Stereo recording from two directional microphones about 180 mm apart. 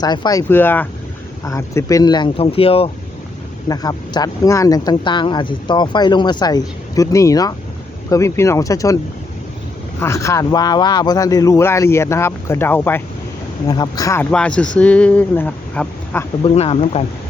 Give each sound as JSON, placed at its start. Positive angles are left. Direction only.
{"t": 0.0, "sound": "speech", "side_deg": 25}
{"t": 3.7, "sound": "speech", "side_deg": 20}
{"t": 10.0, "sound": "speech", "side_deg": 15}
{"t": 13.7, "sound": "speech", "side_deg": 20}
{"t": 16.4, "sound": "speech", "side_deg": 30}